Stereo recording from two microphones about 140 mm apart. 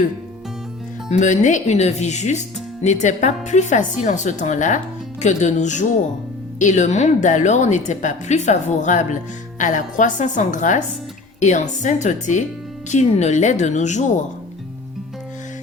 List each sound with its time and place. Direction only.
1.1 s a woman's voice: 60° left (ahead or behind)